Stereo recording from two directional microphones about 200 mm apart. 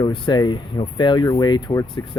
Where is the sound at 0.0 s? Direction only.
20° left (ahead or behind).